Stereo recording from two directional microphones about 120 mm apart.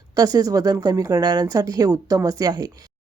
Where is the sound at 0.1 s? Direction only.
30° right (ahead or behind).